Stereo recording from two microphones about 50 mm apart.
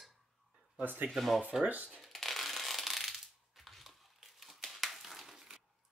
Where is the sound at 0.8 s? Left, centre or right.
Right.